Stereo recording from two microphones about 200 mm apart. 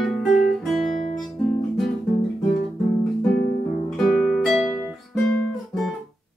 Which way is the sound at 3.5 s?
45° left (ahead or behind).